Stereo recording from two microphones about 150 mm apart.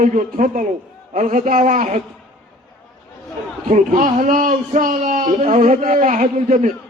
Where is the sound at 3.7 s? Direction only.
60° right (ahead or behind).